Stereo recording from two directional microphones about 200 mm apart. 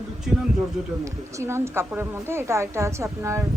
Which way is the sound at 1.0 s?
15° right (ahead or behind).